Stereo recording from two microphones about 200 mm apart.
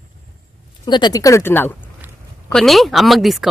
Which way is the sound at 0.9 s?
20° left (ahead or behind).